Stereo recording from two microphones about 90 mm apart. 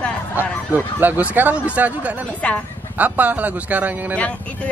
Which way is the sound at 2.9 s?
15° right (ahead or behind).